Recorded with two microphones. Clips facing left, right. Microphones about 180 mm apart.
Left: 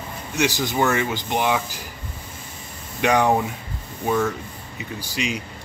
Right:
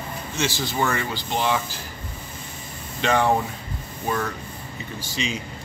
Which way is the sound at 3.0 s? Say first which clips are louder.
Left 2 dB; 15° left (ahead or behind).